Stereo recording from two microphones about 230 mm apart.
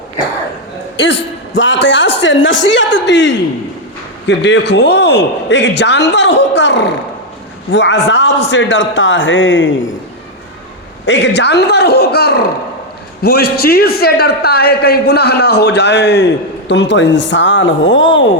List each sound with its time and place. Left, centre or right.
1.5 s a man's voice: left
11.0 s a man's voice: left